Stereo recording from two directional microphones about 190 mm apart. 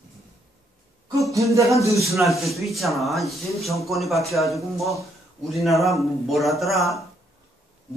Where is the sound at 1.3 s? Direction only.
15° right (ahead or behind).